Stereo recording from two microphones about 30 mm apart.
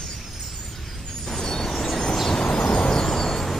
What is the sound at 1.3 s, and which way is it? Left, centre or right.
Vehicle, centre.